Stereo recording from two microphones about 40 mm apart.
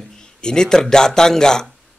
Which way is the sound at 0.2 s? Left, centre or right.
Centre.